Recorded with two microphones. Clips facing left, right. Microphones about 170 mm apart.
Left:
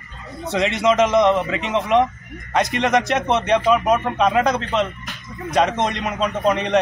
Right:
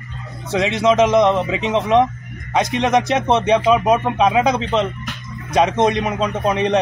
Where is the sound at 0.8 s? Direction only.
25° right (ahead or behind).